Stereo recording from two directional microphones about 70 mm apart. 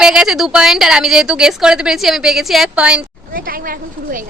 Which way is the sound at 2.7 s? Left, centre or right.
Centre.